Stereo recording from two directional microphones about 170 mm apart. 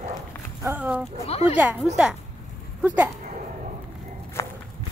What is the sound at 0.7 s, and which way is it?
Speech, 10° right (ahead or behind).